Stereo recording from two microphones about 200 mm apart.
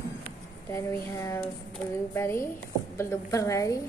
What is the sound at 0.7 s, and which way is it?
Speech, 15° left (ahead or behind).